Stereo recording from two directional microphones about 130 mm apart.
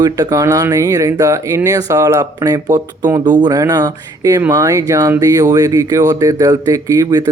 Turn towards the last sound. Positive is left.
turn(degrees=-25)  # may be behind; listen again after turning